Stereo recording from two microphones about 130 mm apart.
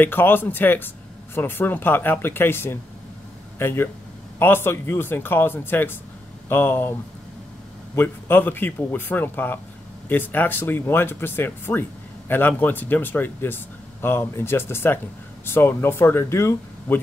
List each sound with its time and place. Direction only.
0.0 s speech: 15° left (ahead or behind)
7.9 s speech: 15° left (ahead or behind)